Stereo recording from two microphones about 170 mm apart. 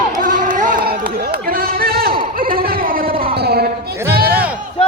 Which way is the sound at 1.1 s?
65° right (ahead or behind).